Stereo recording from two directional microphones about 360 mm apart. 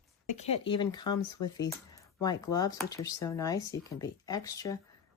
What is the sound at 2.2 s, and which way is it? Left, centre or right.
A woman's voice, centre.